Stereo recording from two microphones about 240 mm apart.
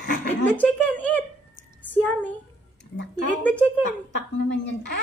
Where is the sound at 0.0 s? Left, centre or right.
Left.